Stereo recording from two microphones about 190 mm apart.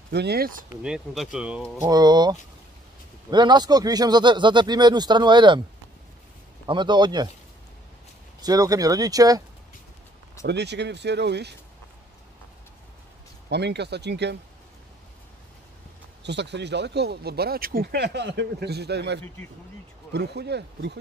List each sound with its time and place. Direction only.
0.1 s speech: 60° right (ahead or behind)
0.8 s speech: centre (ahead or behind)
1.8 s speech: 20° right (ahead or behind)
6.6 s speech: 25° right (ahead or behind)
8.4 s speech: 20° right (ahead or behind)
10.4 s speech: 65° right (ahead or behind)
13.5 s speech: 60° right (ahead or behind)
16.2 s speech: 65° right (ahead or behind)